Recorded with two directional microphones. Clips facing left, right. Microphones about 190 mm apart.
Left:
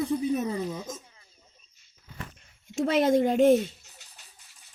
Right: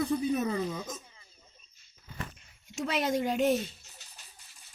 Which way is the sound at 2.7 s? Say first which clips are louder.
Left 8 dB; 50° left (ahead or behind).